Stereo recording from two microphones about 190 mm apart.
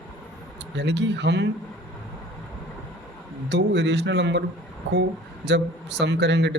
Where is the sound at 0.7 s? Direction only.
65° right (ahead or behind).